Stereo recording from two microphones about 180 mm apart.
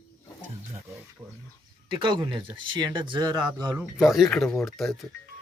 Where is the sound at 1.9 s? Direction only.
25° right (ahead or behind).